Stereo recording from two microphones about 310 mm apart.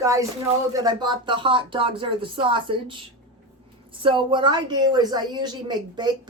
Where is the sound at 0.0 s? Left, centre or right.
Centre.